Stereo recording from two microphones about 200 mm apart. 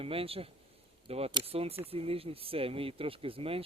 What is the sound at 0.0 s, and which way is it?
Speech, 30° right (ahead or behind).